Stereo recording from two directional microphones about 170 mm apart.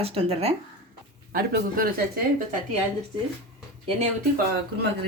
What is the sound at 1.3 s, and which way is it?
Speech, 60° right (ahead or behind).